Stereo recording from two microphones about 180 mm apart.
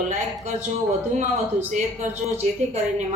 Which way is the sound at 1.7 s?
40° right (ahead or behind).